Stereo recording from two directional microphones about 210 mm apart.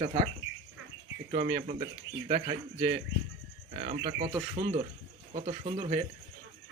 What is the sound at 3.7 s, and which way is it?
Speech, 35° right (ahead or behind).